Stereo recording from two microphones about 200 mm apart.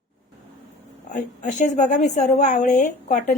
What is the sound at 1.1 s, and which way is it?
A woman's voice, 40° left (ahead or behind).